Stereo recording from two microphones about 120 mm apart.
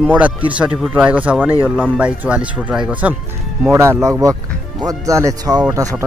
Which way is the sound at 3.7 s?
25° right (ahead or behind).